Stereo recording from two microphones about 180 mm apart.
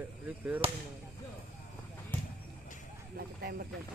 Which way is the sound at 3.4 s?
60° right (ahead or behind).